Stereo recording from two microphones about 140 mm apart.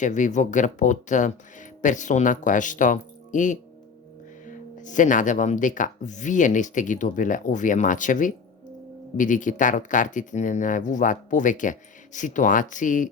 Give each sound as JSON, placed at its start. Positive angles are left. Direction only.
{"t": 0.0, "sound": "speech", "side_deg": 60}